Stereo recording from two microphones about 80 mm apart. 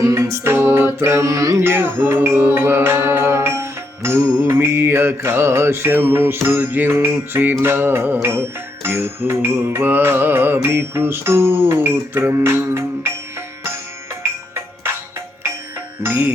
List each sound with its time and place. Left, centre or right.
0.0 s music: right
1.6 s music: right
16.0 s music: right